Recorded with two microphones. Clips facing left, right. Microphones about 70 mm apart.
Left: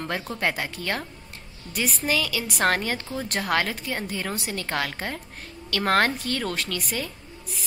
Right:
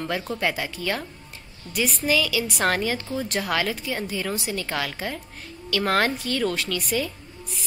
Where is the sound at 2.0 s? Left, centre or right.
Left.